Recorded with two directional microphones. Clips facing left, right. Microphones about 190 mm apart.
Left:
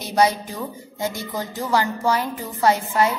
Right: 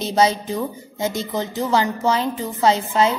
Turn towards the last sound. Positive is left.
turn(degrees=-20)  # may be behind; listen again after turning